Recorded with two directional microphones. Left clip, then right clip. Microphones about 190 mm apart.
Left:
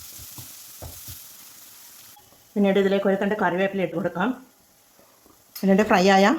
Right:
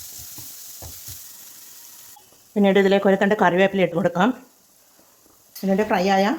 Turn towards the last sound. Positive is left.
turn(degrees=15)  # may be behind; listen again after turning